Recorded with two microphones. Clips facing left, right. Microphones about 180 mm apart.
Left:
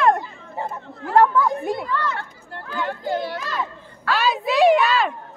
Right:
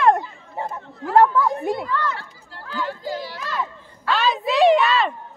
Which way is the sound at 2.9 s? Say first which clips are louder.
Left 4 dB; 55° left (ahead or behind).